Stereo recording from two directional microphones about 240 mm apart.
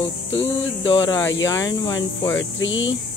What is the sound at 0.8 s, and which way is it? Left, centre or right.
Speech, centre.